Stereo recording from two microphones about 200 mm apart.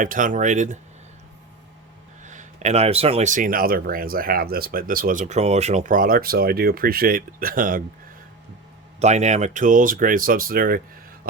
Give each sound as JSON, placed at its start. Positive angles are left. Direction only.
{"t": 0.0, "sound": "speech", "side_deg": -40}
{"t": 2.2, "sound": "speech", "side_deg": -35}
{"t": 9.0, "sound": "speech", "side_deg": -35}